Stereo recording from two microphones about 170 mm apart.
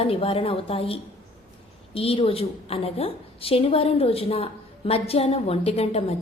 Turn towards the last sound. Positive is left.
turn(degrees=35)  # may be behind; listen again after turning